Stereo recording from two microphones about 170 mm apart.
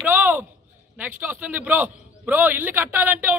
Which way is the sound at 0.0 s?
10° right (ahead or behind).